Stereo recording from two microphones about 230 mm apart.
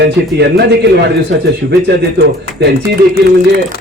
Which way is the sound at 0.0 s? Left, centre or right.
Right.